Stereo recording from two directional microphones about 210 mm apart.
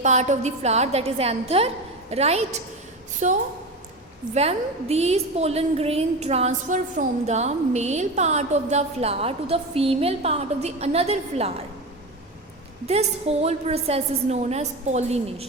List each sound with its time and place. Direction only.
0.0 s a woman's voice: 35° right (ahead or behind)
12.9 s a woman's voice: 30° right (ahead or behind)